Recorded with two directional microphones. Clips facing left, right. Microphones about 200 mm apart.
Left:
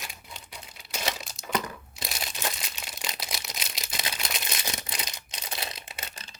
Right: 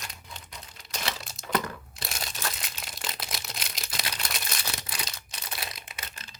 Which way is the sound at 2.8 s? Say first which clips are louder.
Even; centre (ahead or behind).